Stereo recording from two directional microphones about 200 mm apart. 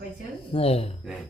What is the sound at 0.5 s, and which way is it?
Speech, 30° left (ahead or behind).